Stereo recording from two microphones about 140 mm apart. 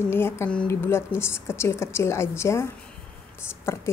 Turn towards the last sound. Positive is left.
turn(degrees=20)  # may be behind; listen again after turning